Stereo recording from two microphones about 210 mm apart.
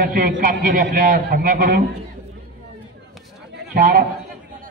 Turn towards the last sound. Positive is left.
turn(degrees=-40)  # may be behind; listen again after turning